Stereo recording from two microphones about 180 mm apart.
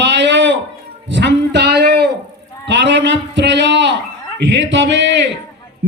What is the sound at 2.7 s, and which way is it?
Speech, 75° right (ahead or behind).